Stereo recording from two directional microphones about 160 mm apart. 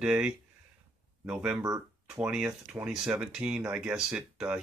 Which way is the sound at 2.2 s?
5° right (ahead or behind).